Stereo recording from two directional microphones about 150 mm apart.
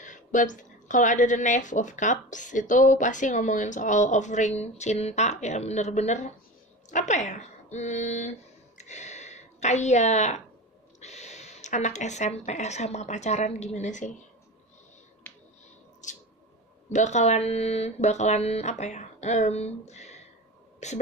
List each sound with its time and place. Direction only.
0.0 s a woman's voice: 55° left (ahead or behind)
16.9 s speech: 50° left (ahead or behind)